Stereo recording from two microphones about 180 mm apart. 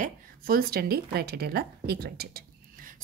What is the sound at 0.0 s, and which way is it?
A woman's voice, 55° right (ahead or behind).